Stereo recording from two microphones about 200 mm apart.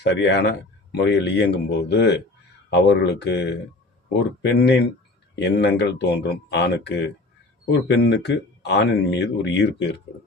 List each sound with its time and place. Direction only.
0.0 s speech: 60° left (ahead or behind)